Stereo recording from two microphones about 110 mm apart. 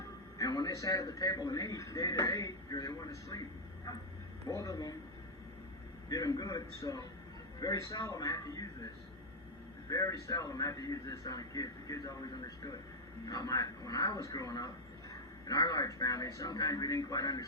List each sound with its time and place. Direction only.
0.3 s a man's voice: 35° left (ahead or behind)
4.4 s a man's voice: 30° left (ahead or behind)
6.1 s a man's voice: 35° left (ahead or behind)
9.9 s a man's voice: 30° left (ahead or behind)